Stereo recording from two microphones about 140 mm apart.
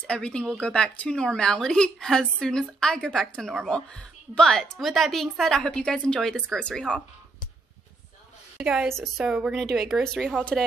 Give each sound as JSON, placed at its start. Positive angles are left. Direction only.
{"t": 0.0, "sound": "a woman's voice", "side_deg": 5}
{"t": 8.5, "sound": "a woman's voice", "side_deg": -5}